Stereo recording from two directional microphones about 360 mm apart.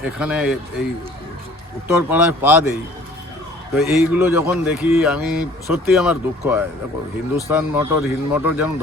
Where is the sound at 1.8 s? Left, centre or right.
Centre.